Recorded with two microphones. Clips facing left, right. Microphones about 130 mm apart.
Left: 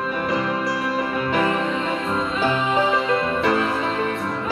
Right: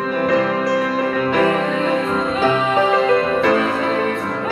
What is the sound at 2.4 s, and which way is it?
Music, 85° right.